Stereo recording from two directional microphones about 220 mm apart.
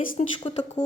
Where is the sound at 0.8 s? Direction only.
20° left (ahead or behind).